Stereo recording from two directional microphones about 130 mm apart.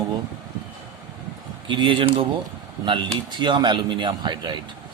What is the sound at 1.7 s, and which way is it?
Speech, 40° right (ahead or behind).